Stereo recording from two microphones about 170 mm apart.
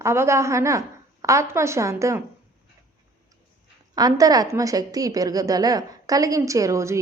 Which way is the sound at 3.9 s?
20° right (ahead or behind).